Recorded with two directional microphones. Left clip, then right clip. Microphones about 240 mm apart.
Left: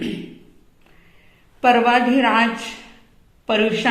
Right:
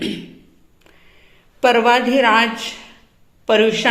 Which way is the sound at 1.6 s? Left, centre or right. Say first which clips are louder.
Right 1 dB; right.